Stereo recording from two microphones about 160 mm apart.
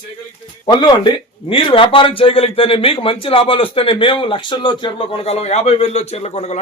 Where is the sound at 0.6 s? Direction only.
25° left (ahead or behind).